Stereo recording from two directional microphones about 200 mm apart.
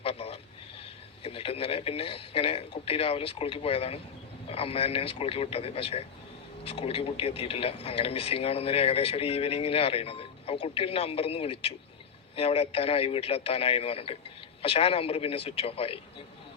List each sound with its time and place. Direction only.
0.0 s speech: 30° left (ahead or behind)